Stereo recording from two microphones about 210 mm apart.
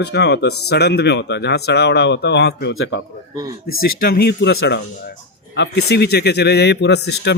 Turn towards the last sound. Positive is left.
turn(degrees=55)  # may be behind; listen again after turning